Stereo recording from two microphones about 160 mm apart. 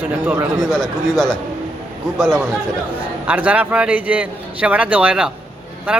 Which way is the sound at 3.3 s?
10° right (ahead or behind).